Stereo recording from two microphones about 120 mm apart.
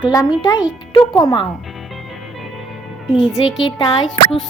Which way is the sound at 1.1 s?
30° left (ahead or behind).